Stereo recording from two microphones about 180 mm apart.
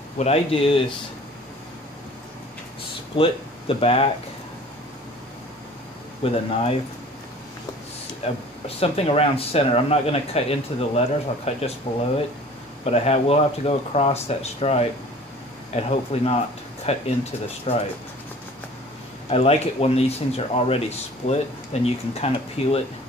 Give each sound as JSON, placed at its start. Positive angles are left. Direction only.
{"t": 0.2, "sound": "speech", "side_deg": 35}
{"t": 3.2, "sound": "speech", "side_deg": 30}
{"t": 6.2, "sound": "speech", "side_deg": 30}
{"t": 8.2, "sound": "speech", "side_deg": 35}
{"t": 12.8, "sound": "speech", "side_deg": 35}
{"t": 19.3, "sound": "speech", "side_deg": 35}